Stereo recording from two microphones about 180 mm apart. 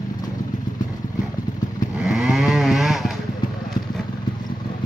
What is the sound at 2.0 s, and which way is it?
Chainsaw, 5° right (ahead or behind).